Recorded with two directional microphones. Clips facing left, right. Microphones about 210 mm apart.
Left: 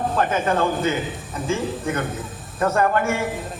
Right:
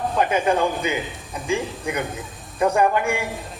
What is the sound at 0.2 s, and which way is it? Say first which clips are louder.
A man's voice: right 2 dB; 15° right (ahead or behind).